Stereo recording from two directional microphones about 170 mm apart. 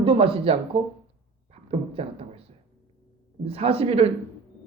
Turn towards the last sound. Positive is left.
turn(degrees=-35)  # may be behind; listen again after turning